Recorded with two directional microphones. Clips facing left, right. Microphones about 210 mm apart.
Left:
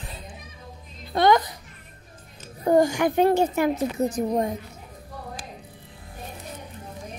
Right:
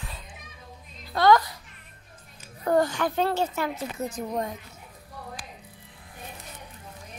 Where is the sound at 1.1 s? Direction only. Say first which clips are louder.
Left 1 dB; 20° left (ahead or behind).